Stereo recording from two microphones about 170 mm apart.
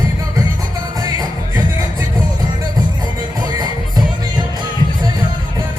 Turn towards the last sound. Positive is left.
turn(degrees=-25)  # may be behind; listen again after turning